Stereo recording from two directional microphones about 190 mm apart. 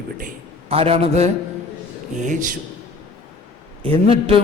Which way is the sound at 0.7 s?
30° right (ahead or behind).